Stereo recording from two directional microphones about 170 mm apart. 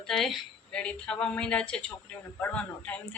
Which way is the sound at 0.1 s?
5° left (ahead or behind).